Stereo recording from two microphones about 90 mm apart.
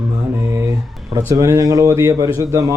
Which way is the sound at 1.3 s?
35° right (ahead or behind).